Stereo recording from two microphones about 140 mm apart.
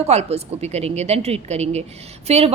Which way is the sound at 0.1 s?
50° right (ahead or behind).